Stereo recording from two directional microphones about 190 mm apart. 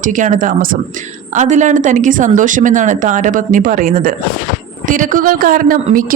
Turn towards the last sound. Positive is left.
turn(degrees=-45)  # may be behind; listen again after turning